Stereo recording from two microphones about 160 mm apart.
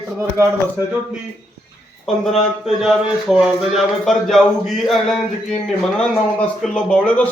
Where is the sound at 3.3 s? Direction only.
Centre (ahead or behind).